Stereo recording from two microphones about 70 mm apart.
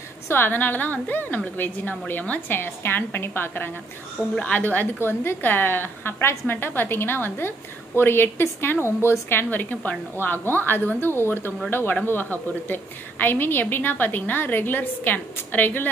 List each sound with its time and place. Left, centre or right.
0.3 s a woman's voice: left
5.0 s a woman's voice: left